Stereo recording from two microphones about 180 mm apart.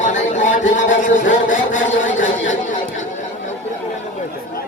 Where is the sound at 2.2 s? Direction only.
45° left (ahead or behind).